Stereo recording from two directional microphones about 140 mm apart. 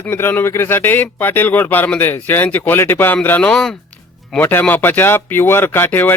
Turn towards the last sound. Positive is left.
turn(degrees=15)  # may be behind; listen again after turning